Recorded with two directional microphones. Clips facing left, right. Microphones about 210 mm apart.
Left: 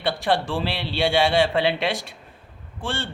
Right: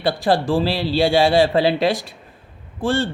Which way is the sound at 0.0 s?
35° right (ahead or behind).